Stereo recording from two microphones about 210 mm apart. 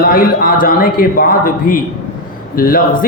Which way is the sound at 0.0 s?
45° left (ahead or behind).